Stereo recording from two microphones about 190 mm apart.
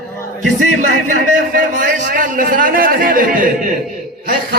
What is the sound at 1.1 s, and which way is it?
A man's voice, 45° right (ahead or behind).